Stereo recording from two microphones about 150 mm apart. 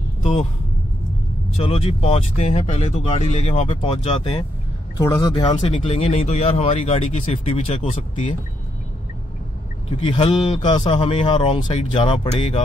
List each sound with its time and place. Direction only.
0.2 s speech: 40° left (ahead or behind)
1.6 s speech: 40° left (ahead or behind)
4.9 s speech: 20° left (ahead or behind)
5.7 s speech: 45° left (ahead or behind)
9.8 s speech: 40° left (ahead or behind)